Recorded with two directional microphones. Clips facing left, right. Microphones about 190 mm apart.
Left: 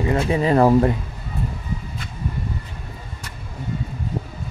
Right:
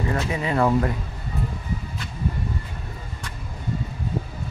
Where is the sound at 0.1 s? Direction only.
30° left (ahead or behind).